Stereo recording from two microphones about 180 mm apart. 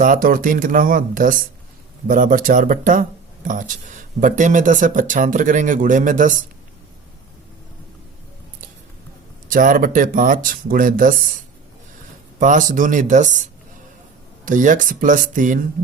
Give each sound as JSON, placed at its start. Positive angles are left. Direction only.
{"t": 0.0, "sound": "speech", "side_deg": -50}
{"t": 9.5, "sound": "speech", "side_deg": -50}
{"t": 12.4, "sound": "speech", "side_deg": -45}
{"t": 14.4, "sound": "speech", "side_deg": -45}